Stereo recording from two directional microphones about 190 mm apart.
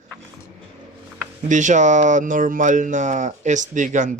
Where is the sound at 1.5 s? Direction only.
40° right (ahead or behind).